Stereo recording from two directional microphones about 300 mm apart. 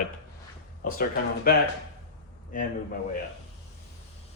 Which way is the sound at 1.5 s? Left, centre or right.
Left.